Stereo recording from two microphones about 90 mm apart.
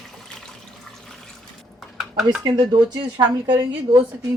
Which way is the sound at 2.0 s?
5° right (ahead or behind).